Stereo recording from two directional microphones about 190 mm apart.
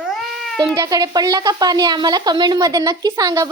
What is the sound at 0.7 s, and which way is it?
A child's voice, 20° right (ahead or behind).